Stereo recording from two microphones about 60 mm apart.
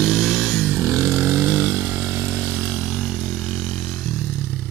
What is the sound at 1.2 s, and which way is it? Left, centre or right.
Vehicle, right.